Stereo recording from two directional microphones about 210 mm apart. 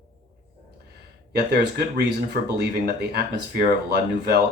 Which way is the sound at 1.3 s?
50° right (ahead or behind).